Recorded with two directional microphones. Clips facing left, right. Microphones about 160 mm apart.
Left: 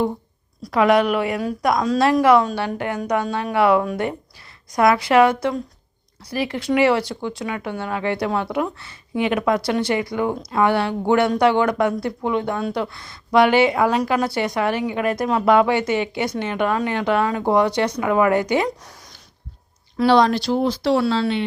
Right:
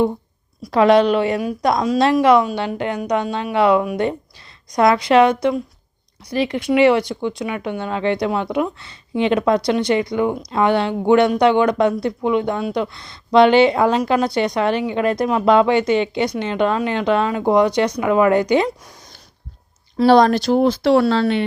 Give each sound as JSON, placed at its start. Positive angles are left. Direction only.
{"t": 0.7, "sound": "speech", "side_deg": -25}
{"t": 20.1, "sound": "speech", "side_deg": -45}